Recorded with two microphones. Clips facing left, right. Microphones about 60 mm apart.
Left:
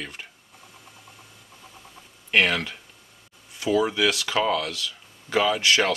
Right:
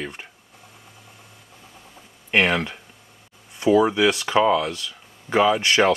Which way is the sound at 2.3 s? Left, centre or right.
Centre.